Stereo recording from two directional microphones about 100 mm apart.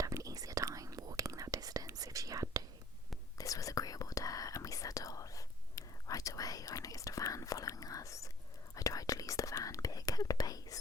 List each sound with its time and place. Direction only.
0.0 s whispering: 35° right (ahead or behind)
3.3 s whispering: 35° left (ahead or behind)